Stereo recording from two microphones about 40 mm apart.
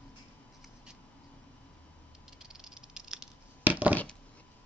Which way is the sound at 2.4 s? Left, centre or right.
Centre.